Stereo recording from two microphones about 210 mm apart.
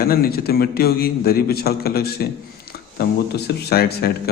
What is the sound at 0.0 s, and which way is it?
A man's voice, 45° left (ahead or behind).